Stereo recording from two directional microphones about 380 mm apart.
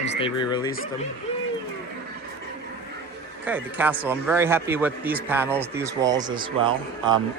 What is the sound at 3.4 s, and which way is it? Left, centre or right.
Speech, centre.